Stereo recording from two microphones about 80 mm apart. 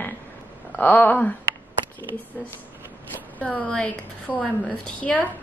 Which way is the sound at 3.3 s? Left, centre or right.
Centre.